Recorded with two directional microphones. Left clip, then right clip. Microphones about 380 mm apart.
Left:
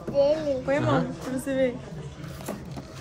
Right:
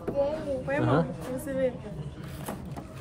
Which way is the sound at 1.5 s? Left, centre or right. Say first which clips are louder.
Left 5 dB; left.